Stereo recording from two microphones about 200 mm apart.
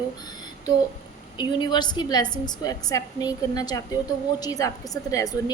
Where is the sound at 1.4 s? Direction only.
25° left (ahead or behind).